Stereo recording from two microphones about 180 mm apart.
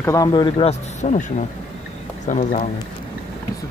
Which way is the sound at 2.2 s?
45° left (ahead or behind).